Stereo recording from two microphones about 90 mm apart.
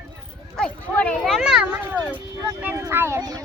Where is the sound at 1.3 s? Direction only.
5° right (ahead or behind).